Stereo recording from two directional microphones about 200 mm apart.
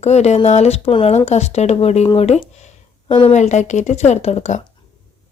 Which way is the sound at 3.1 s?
25° left (ahead or behind).